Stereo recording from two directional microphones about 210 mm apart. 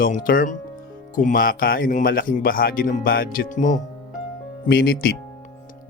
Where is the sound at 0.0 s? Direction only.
40° left (ahead or behind).